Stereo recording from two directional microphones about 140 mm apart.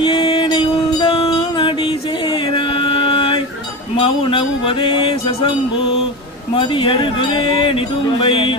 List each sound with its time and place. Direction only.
0.0 s music: 40° left (ahead or behind)
3.9 s speech: 40° left (ahead or behind)
6.6 s speech: 35° left (ahead or behind)